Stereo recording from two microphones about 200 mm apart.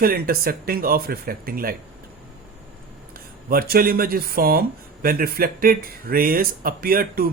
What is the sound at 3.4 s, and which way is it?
Speech, 50° right (ahead or behind).